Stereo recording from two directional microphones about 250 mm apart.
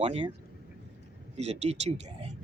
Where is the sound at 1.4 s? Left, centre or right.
Right.